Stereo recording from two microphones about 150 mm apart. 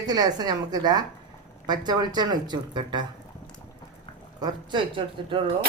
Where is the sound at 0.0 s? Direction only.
25° right (ahead or behind).